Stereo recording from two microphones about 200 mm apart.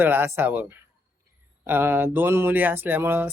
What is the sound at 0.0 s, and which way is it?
Speech, 10° right (ahead or behind).